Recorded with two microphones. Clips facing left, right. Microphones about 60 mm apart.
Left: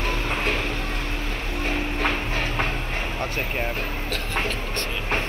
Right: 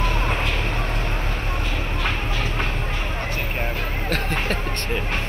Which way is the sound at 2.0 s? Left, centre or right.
Left.